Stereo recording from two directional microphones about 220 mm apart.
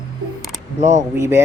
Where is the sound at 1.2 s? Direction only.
10° right (ahead or behind).